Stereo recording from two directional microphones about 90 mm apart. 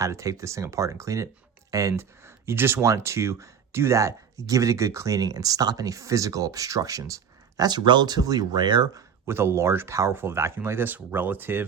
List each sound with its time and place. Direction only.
0.0 s speech: 35° right (ahead or behind); by 8.9 s 55° right (ahead or behind)
9.2 s speech: 30° right (ahead or behind)